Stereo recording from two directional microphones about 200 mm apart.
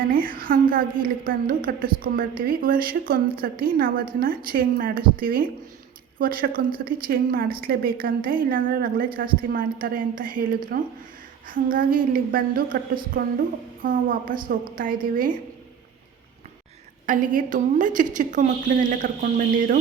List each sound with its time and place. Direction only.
0.1 s a woman's voice: 45° right (ahead or behind)
17.1 s a woman's voice: 40° right (ahead or behind)